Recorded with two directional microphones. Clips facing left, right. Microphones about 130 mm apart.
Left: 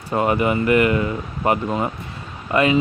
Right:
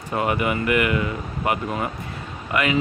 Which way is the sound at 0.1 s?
30° left (ahead or behind).